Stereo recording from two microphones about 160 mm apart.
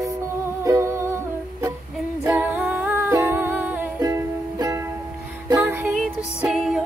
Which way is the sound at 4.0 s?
20° right (ahead or behind).